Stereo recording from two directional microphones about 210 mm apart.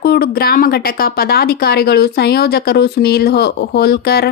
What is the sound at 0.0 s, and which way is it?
A woman's voice, 45° left (ahead or behind).